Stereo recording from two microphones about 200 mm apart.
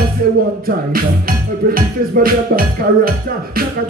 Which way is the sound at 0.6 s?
45° right (ahead or behind).